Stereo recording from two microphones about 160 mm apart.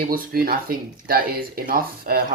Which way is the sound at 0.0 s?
65° right (ahead or behind).